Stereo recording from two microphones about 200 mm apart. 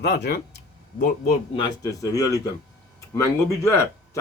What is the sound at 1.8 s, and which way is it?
Speech, 15° left (ahead or behind).